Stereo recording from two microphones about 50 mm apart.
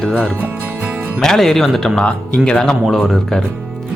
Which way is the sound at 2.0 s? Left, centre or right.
Left.